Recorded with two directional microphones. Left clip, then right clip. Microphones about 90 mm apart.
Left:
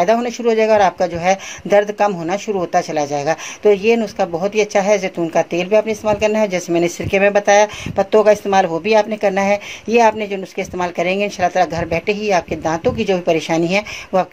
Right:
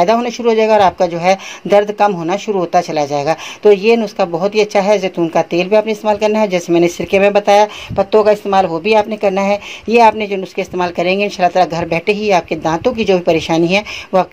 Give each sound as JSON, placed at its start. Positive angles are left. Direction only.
{"t": 0.0, "sound": "speech", "side_deg": -25}
{"t": 7.9, "sound": "speech", "side_deg": 0}
{"t": 8.8, "sound": "speech", "side_deg": -15}